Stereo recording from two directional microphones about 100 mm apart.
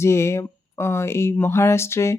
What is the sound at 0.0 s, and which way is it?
Speech, 25° left (ahead or behind).